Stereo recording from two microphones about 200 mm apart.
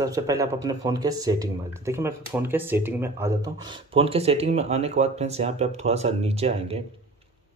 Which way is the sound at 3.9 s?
30° right (ahead or behind).